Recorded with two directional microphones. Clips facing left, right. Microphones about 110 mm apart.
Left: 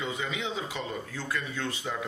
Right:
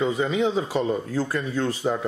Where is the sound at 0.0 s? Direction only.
40° right (ahead or behind).